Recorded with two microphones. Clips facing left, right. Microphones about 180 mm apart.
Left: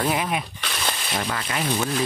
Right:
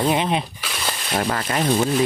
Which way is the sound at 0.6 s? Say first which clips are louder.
Right 1 dB; 5° right (ahead or behind).